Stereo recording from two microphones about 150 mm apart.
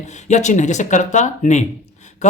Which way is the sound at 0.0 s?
50° left (ahead or behind).